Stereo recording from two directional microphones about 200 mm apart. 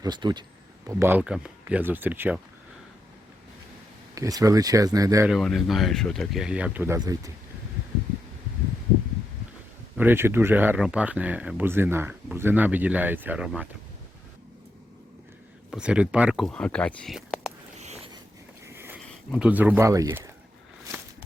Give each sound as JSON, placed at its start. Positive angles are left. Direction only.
{"t": 0.0, "sound": "speech", "side_deg": -20}
{"t": 4.1, "sound": "speech", "side_deg": -15}
{"t": 5.3, "sound": "speech", "side_deg": 0}
{"t": 10.0, "sound": "speech", "side_deg": -10}
{"t": 15.7, "sound": "speech", "side_deg": -5}
{"t": 17.7, "sound": "a sound", "side_deg": -35}
{"t": 18.6, "sound": "a sound", "side_deg": -10}
{"t": 19.0, "sound": "speech", "side_deg": -5}